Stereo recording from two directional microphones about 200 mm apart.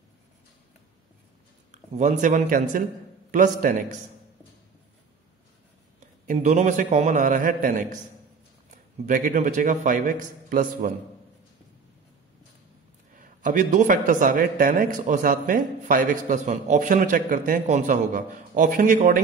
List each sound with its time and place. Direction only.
1.7 s a man's voice: 35° right (ahead or behind)
5.9 s a man's voice: 35° right (ahead or behind)
13.1 s a man's voice: 40° right (ahead or behind)